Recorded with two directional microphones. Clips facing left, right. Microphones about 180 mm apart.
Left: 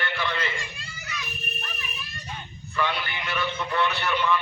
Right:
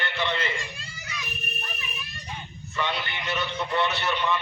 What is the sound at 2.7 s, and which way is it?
A man's voice, 20° right (ahead or behind).